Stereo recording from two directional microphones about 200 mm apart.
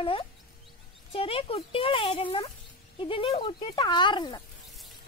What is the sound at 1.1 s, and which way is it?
Speech, 30° left (ahead or behind).